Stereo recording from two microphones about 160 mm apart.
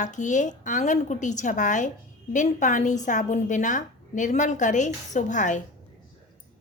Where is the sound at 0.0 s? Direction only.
50° left (ahead or behind).